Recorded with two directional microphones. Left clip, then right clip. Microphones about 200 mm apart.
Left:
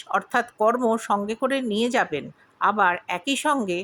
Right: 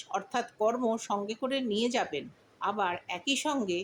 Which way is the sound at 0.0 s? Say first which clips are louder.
Left 9 dB; 30° left (ahead or behind).